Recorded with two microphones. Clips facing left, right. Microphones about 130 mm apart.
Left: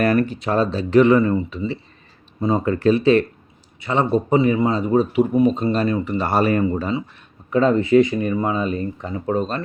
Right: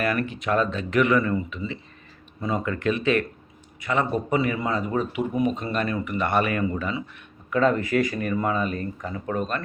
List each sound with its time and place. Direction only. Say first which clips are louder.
0.0 s a man's voice: left 7 dB; 35° left (ahead or behind)